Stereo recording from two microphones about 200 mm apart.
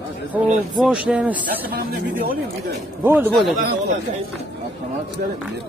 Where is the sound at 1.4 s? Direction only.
45° right (ahead or behind).